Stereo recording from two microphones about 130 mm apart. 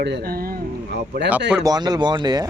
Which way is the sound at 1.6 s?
30° right (ahead or behind).